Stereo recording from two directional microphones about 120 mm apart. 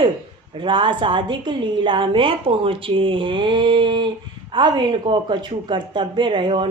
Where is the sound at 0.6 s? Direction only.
45° right (ahead or behind).